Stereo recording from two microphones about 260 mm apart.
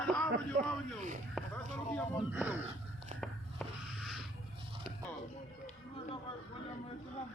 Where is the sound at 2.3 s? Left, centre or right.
Centre.